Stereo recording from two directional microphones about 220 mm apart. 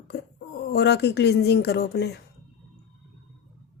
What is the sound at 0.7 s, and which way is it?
Speech, 50° left (ahead or behind).